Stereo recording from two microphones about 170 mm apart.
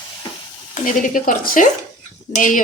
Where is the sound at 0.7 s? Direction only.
50° left (ahead or behind).